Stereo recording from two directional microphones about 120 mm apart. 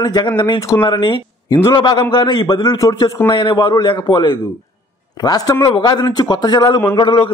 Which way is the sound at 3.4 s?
40° left (ahead or behind).